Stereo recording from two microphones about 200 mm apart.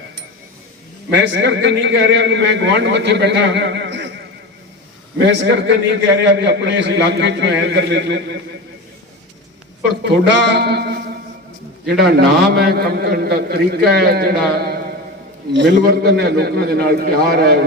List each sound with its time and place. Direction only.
1.1 s a man's voice: 60° right (ahead or behind)
5.1 s a man's voice: 60° right (ahead or behind)
10.0 s a man's voice: 55° right (ahead or behind)